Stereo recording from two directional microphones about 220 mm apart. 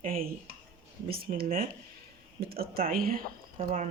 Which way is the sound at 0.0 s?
40° right (ahead or behind).